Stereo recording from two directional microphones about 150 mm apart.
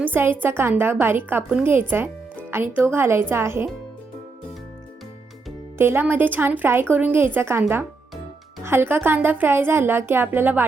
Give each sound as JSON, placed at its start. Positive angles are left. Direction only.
{"t": 0.0, "sound": "a woman's voice", "side_deg": -15}
{"t": 5.7, "sound": "a woman's voice", "side_deg": -15}
{"t": 8.6, "sound": "a woman's voice", "side_deg": -15}